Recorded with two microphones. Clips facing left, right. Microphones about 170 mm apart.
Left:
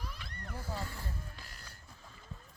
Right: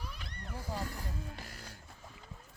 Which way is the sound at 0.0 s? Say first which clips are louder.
Even; 10° right (ahead or behind).